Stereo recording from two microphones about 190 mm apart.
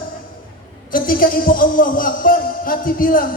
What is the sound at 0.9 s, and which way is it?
A man's voice, 45° left (ahead or behind).